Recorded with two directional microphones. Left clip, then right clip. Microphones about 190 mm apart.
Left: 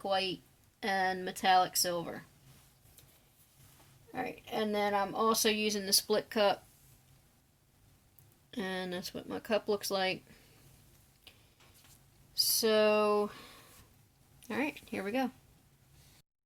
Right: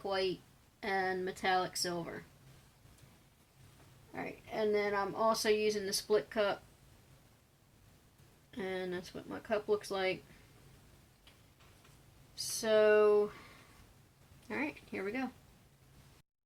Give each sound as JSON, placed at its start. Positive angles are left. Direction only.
{"t": 0.8, "sound": "speech", "side_deg": 35}
{"t": 4.1, "sound": "speech", "side_deg": 30}
{"t": 8.4, "sound": "speech", "side_deg": 40}
{"t": 12.5, "sound": "speech", "side_deg": 35}
{"t": 14.4, "sound": "speech", "side_deg": 40}